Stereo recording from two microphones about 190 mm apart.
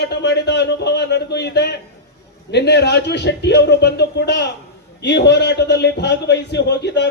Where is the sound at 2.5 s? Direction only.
60° left (ahead or behind).